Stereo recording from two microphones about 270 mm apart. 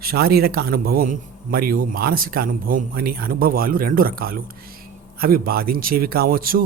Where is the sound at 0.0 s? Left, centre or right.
Right.